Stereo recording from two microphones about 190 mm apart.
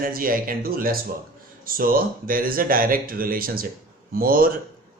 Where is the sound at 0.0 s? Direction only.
50° right (ahead or behind).